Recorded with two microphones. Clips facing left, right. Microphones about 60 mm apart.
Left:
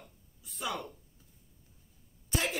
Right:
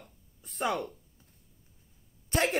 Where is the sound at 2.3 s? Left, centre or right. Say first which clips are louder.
Right 5 dB; right.